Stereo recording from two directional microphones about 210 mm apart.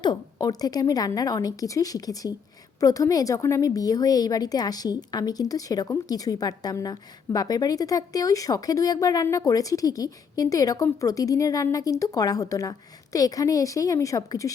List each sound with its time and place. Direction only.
0.0 s a woman's voice: 20° left (ahead or behind)